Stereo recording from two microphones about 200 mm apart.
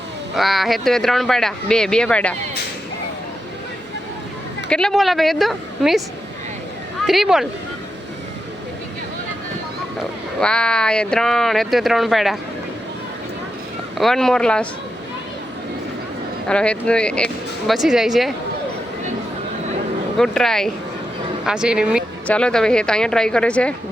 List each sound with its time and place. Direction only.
0.3 s speech: centre (ahead or behind)
4.7 s speech: 5° left (ahead or behind)
7.1 s speech: centre (ahead or behind)
10.4 s speech: 5° left (ahead or behind)
14.0 s speech: centre (ahead or behind)
16.5 s speech: 5° left (ahead or behind)
20.1 s speech: centre (ahead or behind)